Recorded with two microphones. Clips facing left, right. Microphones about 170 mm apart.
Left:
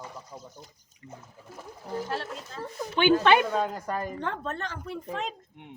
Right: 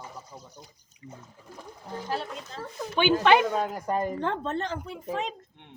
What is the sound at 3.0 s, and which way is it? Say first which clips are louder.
Speech: even; 10° right (ahead or behind).